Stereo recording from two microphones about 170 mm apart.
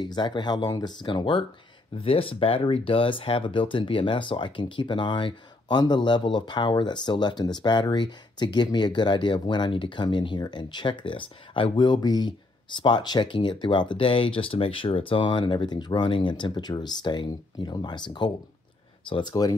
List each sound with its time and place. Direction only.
0.0 s speech: 25° left (ahead or behind)